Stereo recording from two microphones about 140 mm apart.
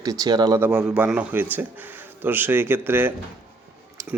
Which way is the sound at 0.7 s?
5° right (ahead or behind).